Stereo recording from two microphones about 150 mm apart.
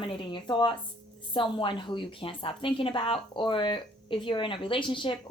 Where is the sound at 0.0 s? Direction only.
35° left (ahead or behind).